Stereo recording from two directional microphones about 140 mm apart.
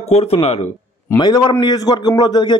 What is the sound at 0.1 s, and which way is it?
Speech, 45° left (ahead or behind).